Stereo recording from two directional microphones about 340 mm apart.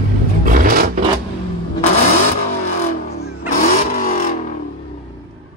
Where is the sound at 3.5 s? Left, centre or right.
Left.